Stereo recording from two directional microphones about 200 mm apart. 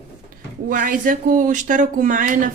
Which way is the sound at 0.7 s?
40° right (ahead or behind).